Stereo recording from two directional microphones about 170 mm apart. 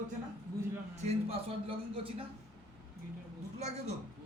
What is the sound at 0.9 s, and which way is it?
Speech, 40° right (ahead or behind).